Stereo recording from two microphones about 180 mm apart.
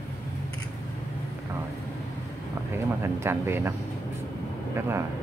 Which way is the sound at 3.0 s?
15° right (ahead or behind).